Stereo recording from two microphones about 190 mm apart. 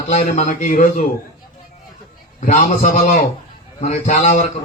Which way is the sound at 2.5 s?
40° left (ahead or behind).